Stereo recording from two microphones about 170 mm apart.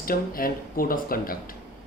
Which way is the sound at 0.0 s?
60° left (ahead or behind).